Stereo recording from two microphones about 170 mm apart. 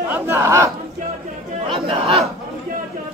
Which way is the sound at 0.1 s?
15° right (ahead or behind).